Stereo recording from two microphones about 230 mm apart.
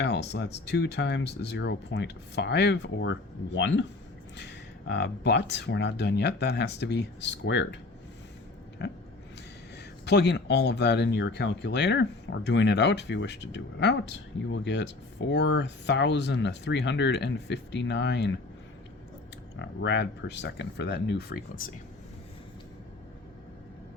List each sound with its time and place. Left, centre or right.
0.0 s speech: left
8.8 s speech: left
19.5 s speech: left